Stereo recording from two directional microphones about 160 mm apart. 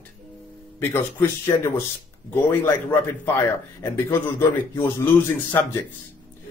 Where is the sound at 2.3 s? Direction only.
10° left (ahead or behind).